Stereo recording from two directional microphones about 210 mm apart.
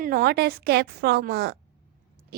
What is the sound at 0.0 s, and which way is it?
A woman's voice, 45° right (ahead or behind).